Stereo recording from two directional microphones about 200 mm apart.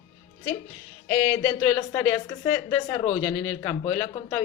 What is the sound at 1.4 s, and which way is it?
Speech, 20° left (ahead or behind).